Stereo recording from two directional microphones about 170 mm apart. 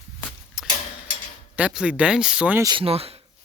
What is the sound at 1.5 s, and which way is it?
Speech, 5° right (ahead or behind).